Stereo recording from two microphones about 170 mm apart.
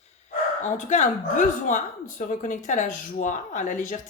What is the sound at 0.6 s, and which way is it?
Speech, 45° left (ahead or behind).